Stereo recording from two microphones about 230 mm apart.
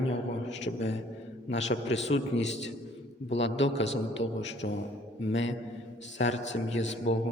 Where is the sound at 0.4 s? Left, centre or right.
Left.